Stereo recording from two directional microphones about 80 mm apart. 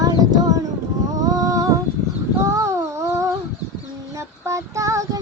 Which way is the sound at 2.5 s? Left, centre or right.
Right.